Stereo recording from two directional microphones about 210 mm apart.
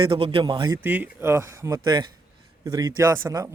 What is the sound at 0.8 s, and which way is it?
Speech, 10° right (ahead or behind).